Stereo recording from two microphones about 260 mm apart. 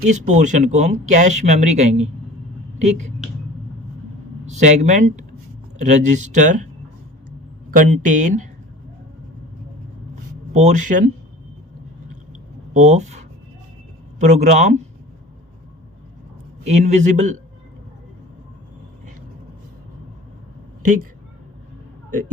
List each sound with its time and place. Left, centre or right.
0.0 s speech: right
4.4 s speech: right
7.8 s speech: right
10.5 s speech: right
12.7 s speech: right
16.6 s speech: right